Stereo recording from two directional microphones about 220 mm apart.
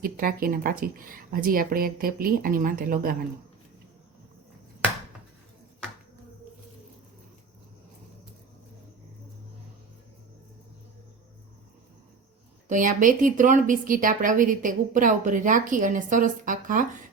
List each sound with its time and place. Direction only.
0.0 s a woman's voice: 40° right (ahead or behind)
12.6 s a woman's voice: 35° right (ahead or behind)